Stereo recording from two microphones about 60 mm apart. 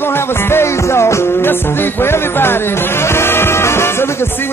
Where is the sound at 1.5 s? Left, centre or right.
Left.